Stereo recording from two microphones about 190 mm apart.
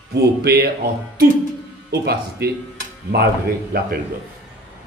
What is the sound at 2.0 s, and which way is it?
A man's voice, 55° right (ahead or behind).